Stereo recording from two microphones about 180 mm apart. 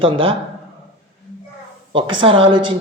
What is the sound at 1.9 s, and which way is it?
Speech, 25° right (ahead or behind).